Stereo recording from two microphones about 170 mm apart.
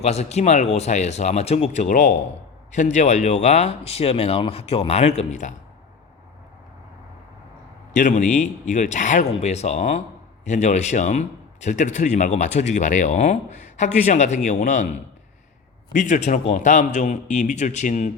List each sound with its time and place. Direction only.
0.0 s speech: 40° left (ahead or behind)
7.9 s speech: 45° left (ahead or behind)